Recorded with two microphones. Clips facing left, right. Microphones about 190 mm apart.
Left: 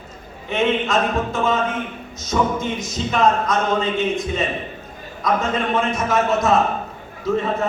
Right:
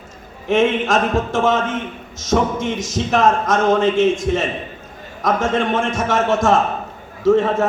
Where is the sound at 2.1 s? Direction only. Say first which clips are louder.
Right 3 dB; 90° right.